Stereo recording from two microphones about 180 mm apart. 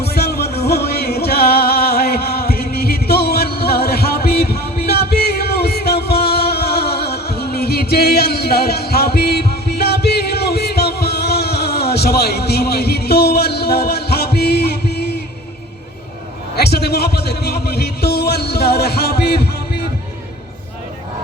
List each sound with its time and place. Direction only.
0.1 s music: 60° left (ahead or behind)
16.6 s music: 65° left (ahead or behind)